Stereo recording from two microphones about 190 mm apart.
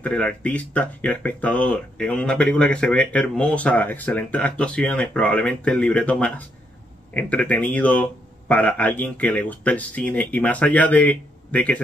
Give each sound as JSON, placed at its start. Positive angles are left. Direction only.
{"t": 0.0, "sound": "speech", "side_deg": 5}